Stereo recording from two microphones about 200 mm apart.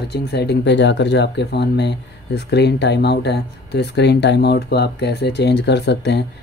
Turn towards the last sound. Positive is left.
turn(degrees=55)  # may be behind; listen again after turning